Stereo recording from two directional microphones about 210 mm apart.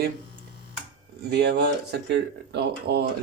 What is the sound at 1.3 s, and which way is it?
Speech, 50° right (ahead or behind).